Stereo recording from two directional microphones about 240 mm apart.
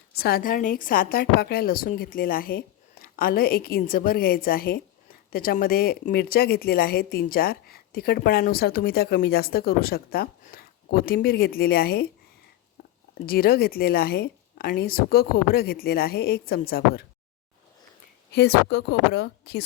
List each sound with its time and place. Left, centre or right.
0.2 s speech: left
13.2 s speech: left
18.3 s a woman's voice: left